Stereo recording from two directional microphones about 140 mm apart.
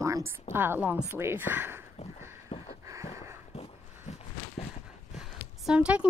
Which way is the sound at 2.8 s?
20° right (ahead or behind).